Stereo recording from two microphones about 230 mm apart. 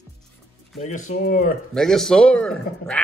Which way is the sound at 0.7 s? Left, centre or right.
Left.